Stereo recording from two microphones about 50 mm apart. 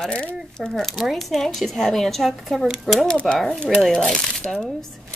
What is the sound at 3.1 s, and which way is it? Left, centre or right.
Speech, centre.